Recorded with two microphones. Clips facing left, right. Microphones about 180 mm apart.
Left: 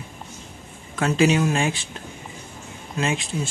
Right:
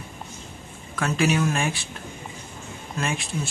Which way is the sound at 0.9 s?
20° left (ahead or behind).